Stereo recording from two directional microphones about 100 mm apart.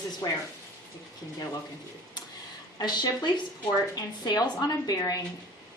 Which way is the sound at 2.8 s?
45° left (ahead or behind).